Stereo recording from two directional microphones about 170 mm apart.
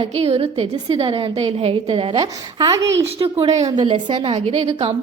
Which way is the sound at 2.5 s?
20° right (ahead or behind).